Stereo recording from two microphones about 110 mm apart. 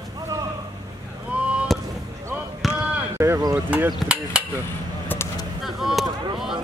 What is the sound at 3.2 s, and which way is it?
Speech, 25° right (ahead or behind).